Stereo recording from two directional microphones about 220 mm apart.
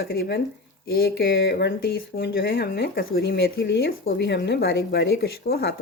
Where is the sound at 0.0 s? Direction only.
45° left (ahead or behind).